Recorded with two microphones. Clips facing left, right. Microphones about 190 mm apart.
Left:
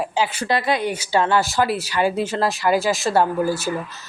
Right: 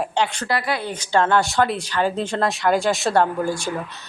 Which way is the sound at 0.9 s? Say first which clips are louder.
Right 5 dB; 5° left (ahead or behind).